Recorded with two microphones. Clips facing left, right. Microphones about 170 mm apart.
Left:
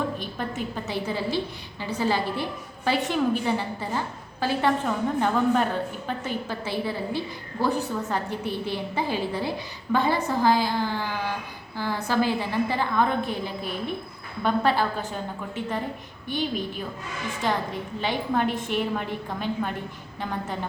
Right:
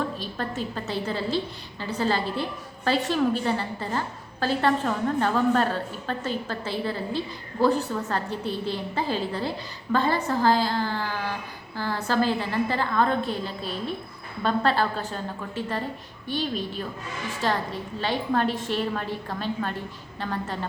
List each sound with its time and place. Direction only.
0.2 s a woman's voice: 15° left (ahead or behind)